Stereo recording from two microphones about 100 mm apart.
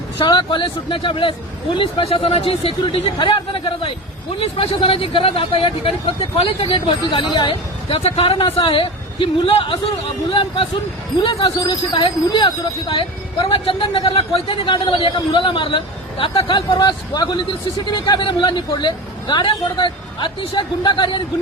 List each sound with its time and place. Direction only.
0.2 s speech: 55° left (ahead or behind); by 3.1 s 70° left (ahead or behind)
3.2 s speech: 55° left (ahead or behind)
4.4 s speech: 70° left (ahead or behind); by 7.9 s 55° left (ahead or behind)
7.9 s speech: 90° left; by 9.7 s 65° left (ahead or behind)
11.2 s speech: 55° left (ahead or behind)